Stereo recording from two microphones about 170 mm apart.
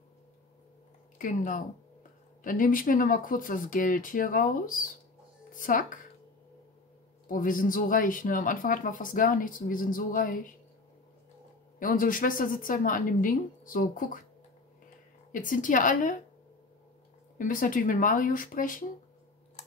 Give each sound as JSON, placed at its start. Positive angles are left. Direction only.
{"t": 1.1, "sound": "speech", "side_deg": 50}
{"t": 7.2, "sound": "speech", "side_deg": 55}
{"t": 11.8, "sound": "speech", "side_deg": 55}
{"t": 15.3, "sound": "speech", "side_deg": 50}
{"t": 17.4, "sound": "speech", "side_deg": 50}